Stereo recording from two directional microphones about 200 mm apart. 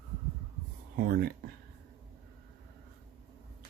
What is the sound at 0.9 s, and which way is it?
Speech, 50° right (ahead or behind).